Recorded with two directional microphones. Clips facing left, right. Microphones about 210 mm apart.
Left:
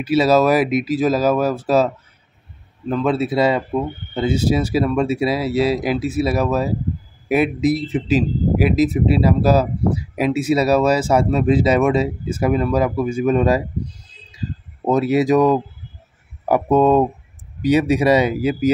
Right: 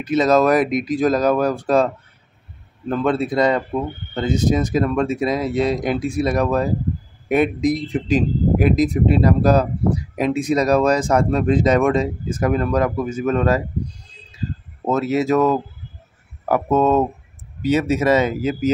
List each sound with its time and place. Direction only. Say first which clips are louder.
0.0 s speech: left 1 dB; 10° left (ahead or behind)
2.9 s speech: left 1 dB; centre (ahead or behind)
14.9 s speech: left 3 dB; 15° left (ahead or behind)